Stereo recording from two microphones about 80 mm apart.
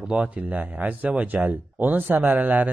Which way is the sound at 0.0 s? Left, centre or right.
Centre.